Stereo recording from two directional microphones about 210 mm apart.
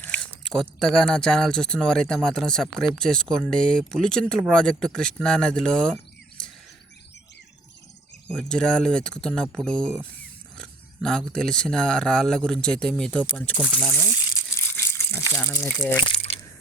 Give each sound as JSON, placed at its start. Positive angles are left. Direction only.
{"t": 0.0, "sound": "speech", "side_deg": 5}
{"t": 8.4, "sound": "speech", "side_deg": 5}
{"t": 16.0, "sound": "a sound", "side_deg": 30}